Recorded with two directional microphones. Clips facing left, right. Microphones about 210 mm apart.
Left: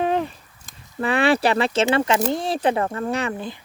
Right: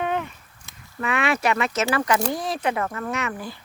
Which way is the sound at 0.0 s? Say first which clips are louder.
Left 4 dB; 35° left (ahead or behind).